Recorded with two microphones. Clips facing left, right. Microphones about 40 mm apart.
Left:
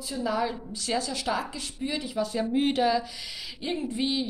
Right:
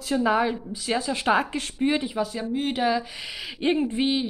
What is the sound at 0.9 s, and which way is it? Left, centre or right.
Speech, right.